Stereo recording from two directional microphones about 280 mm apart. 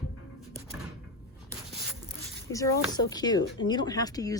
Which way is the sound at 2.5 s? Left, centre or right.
Centre.